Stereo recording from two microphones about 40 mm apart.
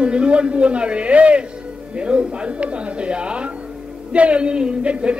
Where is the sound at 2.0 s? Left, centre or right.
Right.